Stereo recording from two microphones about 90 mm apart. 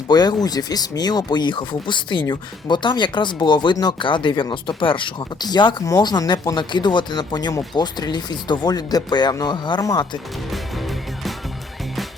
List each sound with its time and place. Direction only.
0.1 s speech: 50° left (ahead or behind); by 5.5 s 70° left (ahead or behind)
5.5 s speech: 55° left (ahead or behind)
9.8 s speech: 40° left (ahead or behind)